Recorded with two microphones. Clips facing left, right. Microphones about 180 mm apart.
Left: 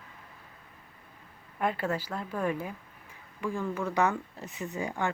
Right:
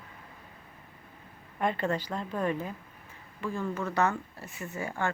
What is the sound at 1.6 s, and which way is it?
Speech, 5° left (ahead or behind).